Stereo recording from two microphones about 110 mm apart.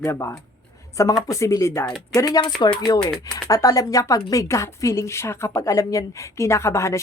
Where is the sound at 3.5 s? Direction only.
30° left (ahead or behind).